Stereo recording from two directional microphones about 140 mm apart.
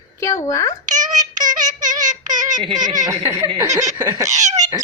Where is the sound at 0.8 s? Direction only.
65° right (ahead or behind).